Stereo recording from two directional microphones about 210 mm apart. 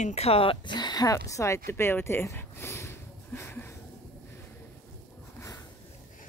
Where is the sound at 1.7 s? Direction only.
10° left (ahead or behind).